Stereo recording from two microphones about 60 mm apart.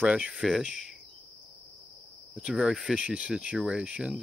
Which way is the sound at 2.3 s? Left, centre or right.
Centre.